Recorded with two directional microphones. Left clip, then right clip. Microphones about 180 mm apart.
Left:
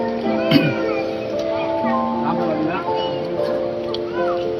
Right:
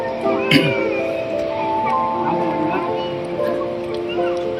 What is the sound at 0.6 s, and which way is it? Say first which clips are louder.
Speech: even; 20° left (ahead or behind).